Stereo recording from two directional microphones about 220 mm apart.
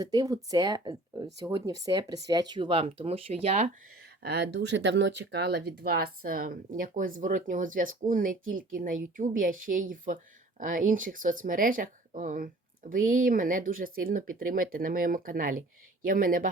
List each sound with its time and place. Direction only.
0.0 s speech: 20° right (ahead or behind)
4.2 s speech: 50° right (ahead or behind)